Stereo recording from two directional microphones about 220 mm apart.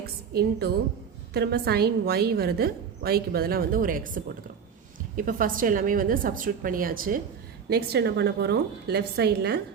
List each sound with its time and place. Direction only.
0.0 s a woman's voice: 45° right (ahead or behind)